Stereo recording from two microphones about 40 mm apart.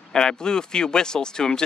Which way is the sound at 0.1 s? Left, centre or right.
Centre.